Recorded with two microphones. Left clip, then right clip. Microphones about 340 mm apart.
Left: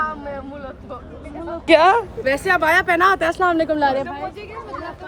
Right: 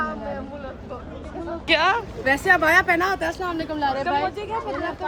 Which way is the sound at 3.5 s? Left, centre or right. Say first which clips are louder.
Left 9 dB; left.